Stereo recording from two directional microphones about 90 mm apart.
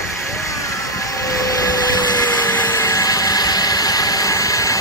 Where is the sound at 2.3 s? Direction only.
45° left (ahead or behind).